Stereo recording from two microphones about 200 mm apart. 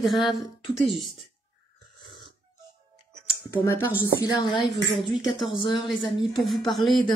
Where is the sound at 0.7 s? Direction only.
Centre (ahead or behind).